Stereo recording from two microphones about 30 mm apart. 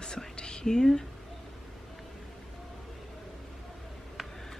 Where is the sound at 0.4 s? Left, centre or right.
Left.